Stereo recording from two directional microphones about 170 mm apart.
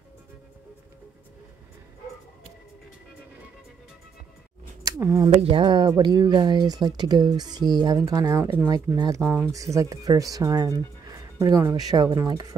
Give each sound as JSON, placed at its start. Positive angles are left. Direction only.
{"t": 5.0, "sound": "speech", "side_deg": -20}
{"t": 5.4, "sound": "speech", "side_deg": -30}